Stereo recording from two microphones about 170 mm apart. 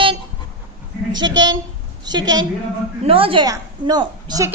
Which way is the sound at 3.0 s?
30° right (ahead or behind).